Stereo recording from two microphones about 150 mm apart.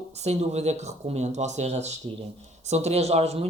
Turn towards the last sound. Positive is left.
turn(degrees=-45)  # may be behind; listen again after turning